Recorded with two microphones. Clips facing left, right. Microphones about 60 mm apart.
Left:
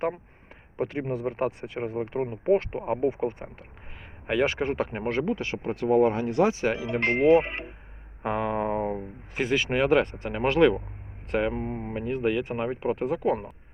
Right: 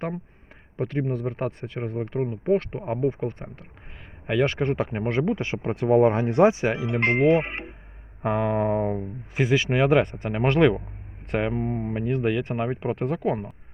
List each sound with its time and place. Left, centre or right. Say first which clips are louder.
0.8 s speech: right 2 dB; centre
5.4 s speech: right 2 dB; right
6.6 s speech: right 2 dB; centre
8.2 s speech: right 3 dB; centre